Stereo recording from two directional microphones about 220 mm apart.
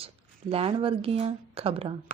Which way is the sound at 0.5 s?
25° right (ahead or behind).